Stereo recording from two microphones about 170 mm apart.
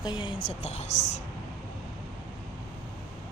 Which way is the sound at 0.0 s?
25° left (ahead or behind).